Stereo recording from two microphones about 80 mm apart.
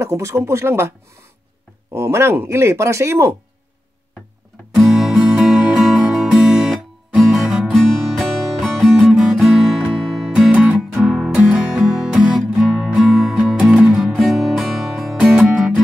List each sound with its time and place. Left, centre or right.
0.0 s speech: right
4.7 s music: centre
8.0 s music: centre